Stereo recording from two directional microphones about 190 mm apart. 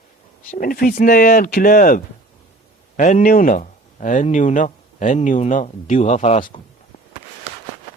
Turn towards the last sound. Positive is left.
turn(degrees=40)  # may be behind; listen again after turning